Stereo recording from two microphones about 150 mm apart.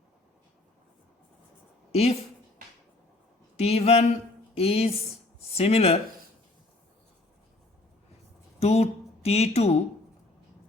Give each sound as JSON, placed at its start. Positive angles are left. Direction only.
{"t": 1.9, "sound": "a woman's voice", "side_deg": 45}
{"t": 3.6, "sound": "a woman's voice", "side_deg": 45}
{"t": 8.5, "sound": "speech", "side_deg": 45}